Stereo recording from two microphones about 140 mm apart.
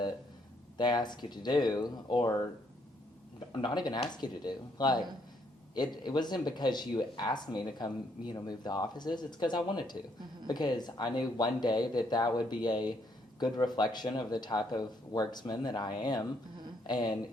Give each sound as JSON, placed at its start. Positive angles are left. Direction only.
{"t": 0.8, "sound": "speech", "side_deg": 30}
{"t": 3.5, "sound": "speech", "side_deg": 35}